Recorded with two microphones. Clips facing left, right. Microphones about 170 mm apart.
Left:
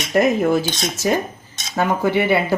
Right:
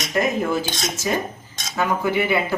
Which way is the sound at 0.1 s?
40° left (ahead or behind).